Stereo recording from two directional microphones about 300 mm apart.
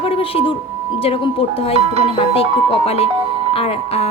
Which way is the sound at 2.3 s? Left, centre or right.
Centre.